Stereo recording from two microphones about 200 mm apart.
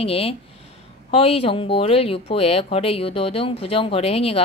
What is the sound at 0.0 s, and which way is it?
Speech, 30° left (ahead or behind).